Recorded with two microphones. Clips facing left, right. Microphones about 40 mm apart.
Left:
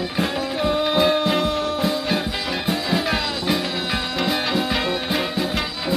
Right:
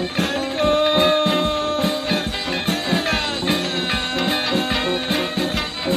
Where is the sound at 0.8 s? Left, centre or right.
Right.